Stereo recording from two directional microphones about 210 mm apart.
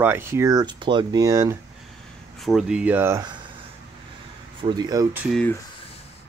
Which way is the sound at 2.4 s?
Centre (ahead or behind).